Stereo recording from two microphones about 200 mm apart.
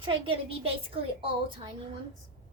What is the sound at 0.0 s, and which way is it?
A woman's voice, 25° right (ahead or behind).